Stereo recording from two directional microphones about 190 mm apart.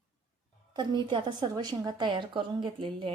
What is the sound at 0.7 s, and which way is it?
A woman's voice, 25° right (ahead or behind).